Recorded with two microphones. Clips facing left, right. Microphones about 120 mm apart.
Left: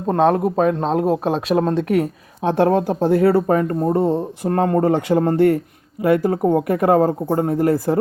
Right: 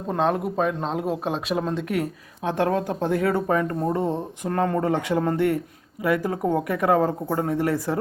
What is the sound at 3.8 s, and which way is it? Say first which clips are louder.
Speech: left 6 dB; 30° left (ahead or behind).